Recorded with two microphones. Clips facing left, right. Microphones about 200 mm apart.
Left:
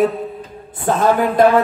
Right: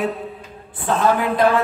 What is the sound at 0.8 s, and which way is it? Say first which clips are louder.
Speech: left 3 dB; 45° left (ahead or behind).